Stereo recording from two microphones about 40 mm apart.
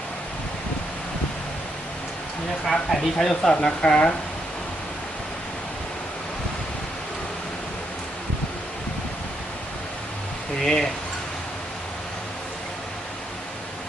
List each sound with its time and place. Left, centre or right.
2.6 s speech: centre
3.7 s a woman's voice: left
10.6 s speech: centre